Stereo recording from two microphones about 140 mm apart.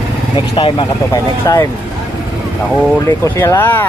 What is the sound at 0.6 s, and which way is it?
Speech, 40° left (ahead or behind).